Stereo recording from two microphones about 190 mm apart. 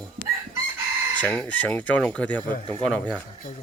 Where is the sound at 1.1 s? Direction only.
10° left (ahead or behind).